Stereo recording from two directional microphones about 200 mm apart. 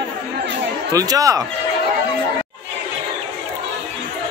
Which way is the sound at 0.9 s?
15° right (ahead or behind).